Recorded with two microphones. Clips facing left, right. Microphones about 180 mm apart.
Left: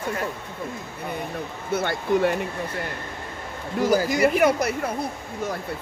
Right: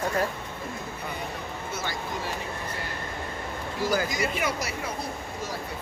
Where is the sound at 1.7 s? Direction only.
60° left (ahead or behind).